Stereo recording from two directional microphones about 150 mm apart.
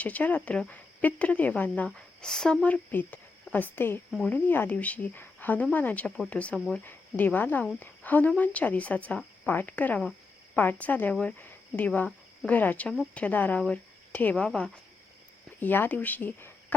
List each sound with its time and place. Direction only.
0.0 s a woman's voice: 10° left (ahead or behind)